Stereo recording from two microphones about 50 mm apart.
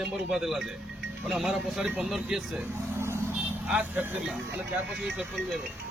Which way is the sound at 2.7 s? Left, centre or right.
Right.